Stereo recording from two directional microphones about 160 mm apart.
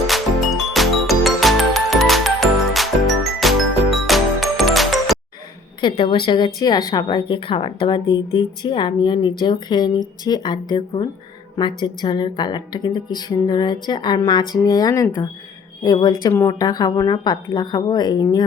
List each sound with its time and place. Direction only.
0.1 s music: centre (ahead or behind)
5.8 s speech: 30° left (ahead or behind)